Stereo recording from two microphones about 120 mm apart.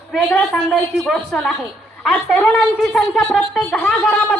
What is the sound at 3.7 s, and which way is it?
Speech, 10° left (ahead or behind).